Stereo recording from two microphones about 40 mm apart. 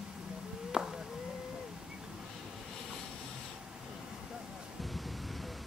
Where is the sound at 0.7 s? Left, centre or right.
Centre.